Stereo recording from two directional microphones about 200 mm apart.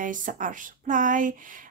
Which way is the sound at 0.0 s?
40° right (ahead or behind).